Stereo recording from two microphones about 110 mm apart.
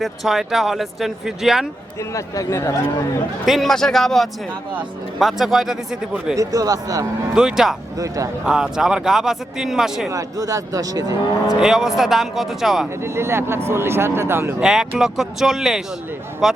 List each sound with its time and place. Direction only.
0.0 s speech: centre (ahead or behind)
2.1 s speech: 30° left (ahead or behind)
3.4 s speech: centre (ahead or behind)
6.3 s speech: 30° right (ahead or behind)
7.3 s speech: 5° right (ahead or behind)
7.9 s speech: 30° right (ahead or behind)
8.4 s speech: 5° right (ahead or behind)
10.1 s speech: 30° right (ahead or behind)
11.4 s speech: 5° right (ahead or behind)
13.0 s speech: 25° right (ahead or behind)
14.6 s speech: 5° right (ahead or behind)